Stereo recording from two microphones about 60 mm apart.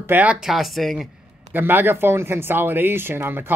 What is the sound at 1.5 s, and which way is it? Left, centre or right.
Speech, right.